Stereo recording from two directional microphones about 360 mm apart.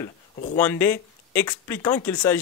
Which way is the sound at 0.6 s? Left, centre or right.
Centre.